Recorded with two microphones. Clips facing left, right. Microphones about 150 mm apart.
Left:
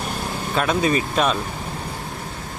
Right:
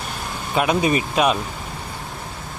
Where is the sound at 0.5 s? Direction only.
10° right (ahead or behind).